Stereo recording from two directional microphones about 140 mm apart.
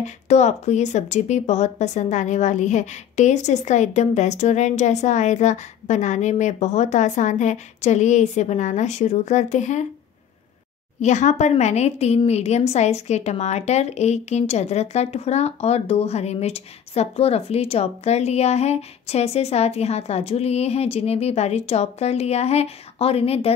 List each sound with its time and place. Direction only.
0.0 s speech: 55° left (ahead or behind)
11.0 s a woman's voice: 55° left (ahead or behind)